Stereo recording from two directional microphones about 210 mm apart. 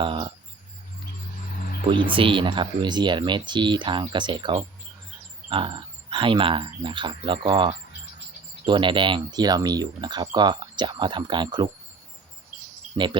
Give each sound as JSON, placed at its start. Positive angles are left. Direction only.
{"t": 0.0, "sound": "speech", "side_deg": -25}
{"t": 1.8, "sound": "speech", "side_deg": -25}